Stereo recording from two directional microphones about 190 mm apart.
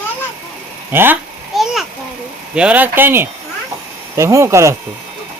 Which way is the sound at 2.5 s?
5° right (ahead or behind).